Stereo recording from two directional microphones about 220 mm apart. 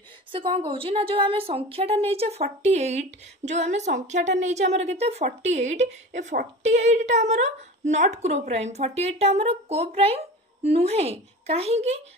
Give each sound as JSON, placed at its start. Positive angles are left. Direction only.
{"t": 0.3, "sound": "a woman's voice", "side_deg": -25}